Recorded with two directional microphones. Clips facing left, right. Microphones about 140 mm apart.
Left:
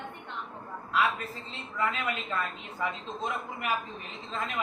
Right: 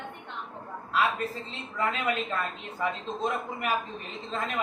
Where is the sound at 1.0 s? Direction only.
25° right (ahead or behind).